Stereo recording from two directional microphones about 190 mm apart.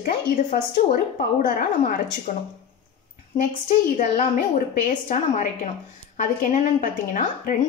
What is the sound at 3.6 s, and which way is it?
A woman's voice, 40° left (ahead or behind).